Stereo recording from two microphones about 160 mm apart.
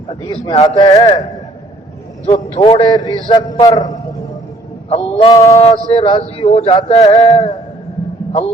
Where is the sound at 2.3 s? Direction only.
45° left (ahead or behind); by 3.9 s 25° left (ahead or behind).